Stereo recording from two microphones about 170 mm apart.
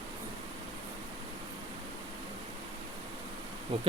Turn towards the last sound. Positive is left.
turn(degrees=-30)  # may be behind; listen again after turning